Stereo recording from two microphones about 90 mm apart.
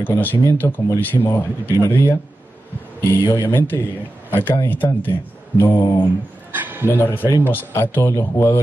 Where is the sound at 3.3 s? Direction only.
25° left (ahead or behind).